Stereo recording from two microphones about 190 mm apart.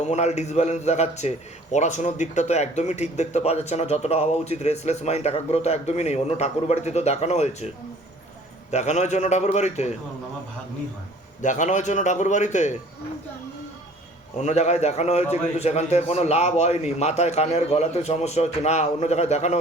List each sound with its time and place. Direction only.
0.0 s speech: 35° left (ahead or behind)
8.7 s speech: 35° left (ahead or behind)
11.4 s speech: 40° left (ahead or behind)
14.3 s speech: 35° left (ahead or behind)